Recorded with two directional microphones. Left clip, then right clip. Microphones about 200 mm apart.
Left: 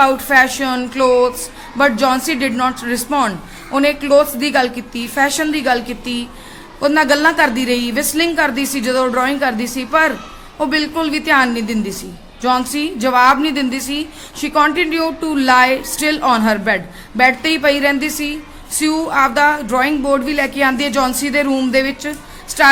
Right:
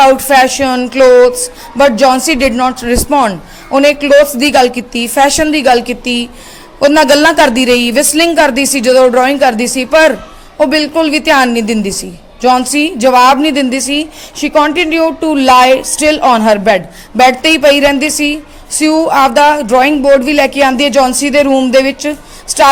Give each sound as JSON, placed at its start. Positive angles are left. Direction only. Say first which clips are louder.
{"t": 0.0, "sound": "a woman's voice", "louder": "right 6 dB", "side_deg": -30}